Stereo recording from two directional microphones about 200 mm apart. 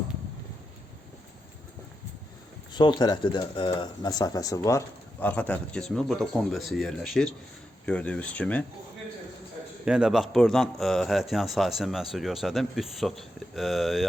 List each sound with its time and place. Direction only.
2.7 s speech: 20° left (ahead or behind); by 8.6 s 5° left (ahead or behind)
9.8 s speech: 5° right (ahead or behind)